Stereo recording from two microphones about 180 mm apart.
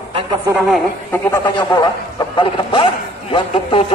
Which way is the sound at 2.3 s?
25° left (ahead or behind).